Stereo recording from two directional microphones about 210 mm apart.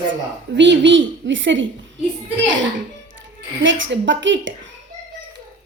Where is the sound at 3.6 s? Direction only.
60° right (ahead or behind).